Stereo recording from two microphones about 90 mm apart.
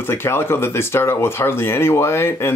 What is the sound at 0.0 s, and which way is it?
Speech, 25° left (ahead or behind).